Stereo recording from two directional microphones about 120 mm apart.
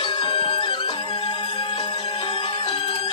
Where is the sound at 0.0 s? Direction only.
40° left (ahead or behind).